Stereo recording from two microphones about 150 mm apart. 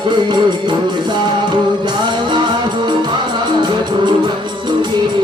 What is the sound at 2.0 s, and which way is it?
Music, 30° right (ahead or behind).